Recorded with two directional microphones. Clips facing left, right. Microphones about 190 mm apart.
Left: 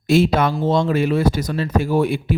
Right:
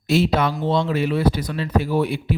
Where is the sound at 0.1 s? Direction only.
50° left (ahead or behind).